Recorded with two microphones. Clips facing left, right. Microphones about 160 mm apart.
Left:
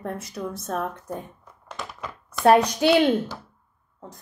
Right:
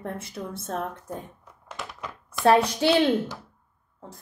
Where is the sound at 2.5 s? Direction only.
30° right (ahead or behind).